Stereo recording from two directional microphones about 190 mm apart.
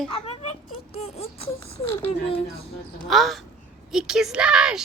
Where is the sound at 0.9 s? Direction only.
35° left (ahead or behind).